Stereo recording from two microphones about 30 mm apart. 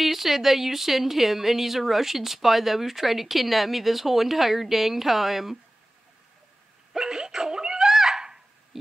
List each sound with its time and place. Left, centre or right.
0.0 s a woman's voice: centre
7.0 s dog: right
7.9 s a sound: centre